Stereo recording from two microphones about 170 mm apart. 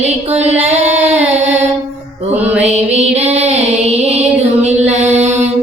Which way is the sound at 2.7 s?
40° right (ahead or behind).